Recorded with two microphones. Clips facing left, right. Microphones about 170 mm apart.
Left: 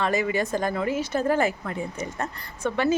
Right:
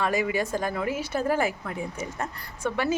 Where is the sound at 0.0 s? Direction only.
10° right (ahead or behind).